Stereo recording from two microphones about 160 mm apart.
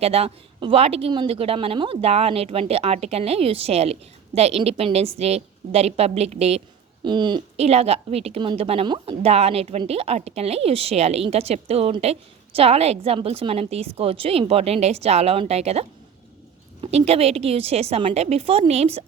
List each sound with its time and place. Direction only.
0.0 s a woman's voice: 40° right (ahead or behind)
7.0 s speech: 30° right (ahead or behind)
7.5 s a woman's voice: 40° right (ahead or behind)